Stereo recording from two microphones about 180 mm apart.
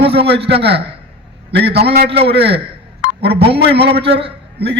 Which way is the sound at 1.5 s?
65° right (ahead or behind).